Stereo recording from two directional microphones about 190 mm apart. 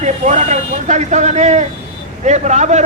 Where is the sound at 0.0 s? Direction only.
40° right (ahead or behind).